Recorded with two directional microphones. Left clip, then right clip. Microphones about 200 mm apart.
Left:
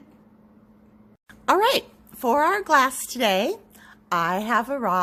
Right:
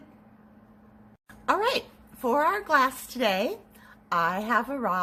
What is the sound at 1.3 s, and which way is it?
A woman's voice, 45° left (ahead or behind).